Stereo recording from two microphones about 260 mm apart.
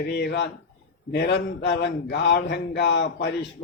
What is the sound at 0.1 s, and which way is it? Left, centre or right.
Speech, left.